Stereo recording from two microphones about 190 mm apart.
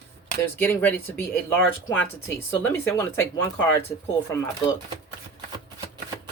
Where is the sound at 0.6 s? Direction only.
10° left (ahead or behind).